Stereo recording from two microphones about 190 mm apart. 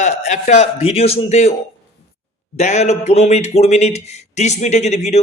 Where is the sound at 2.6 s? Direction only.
35° left (ahead or behind).